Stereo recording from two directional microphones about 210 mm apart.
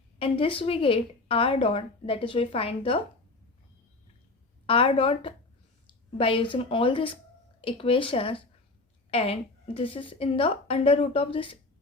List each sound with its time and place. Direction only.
0.2 s a woman's voice: 25° left (ahead or behind)
4.6 s a woman's voice: 25° left (ahead or behind)